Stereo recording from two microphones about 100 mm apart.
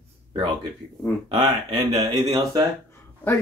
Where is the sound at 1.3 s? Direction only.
45° right (ahead or behind).